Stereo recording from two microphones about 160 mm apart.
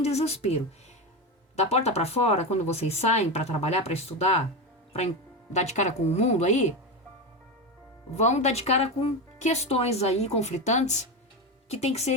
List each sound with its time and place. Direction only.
0.0 s speech: 40° left (ahead or behind)
5.5 s speech: 45° left (ahead or behind)
8.1 s speech: 45° left (ahead or behind)